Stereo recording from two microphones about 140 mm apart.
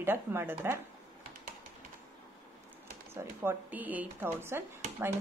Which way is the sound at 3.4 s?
10° right (ahead or behind).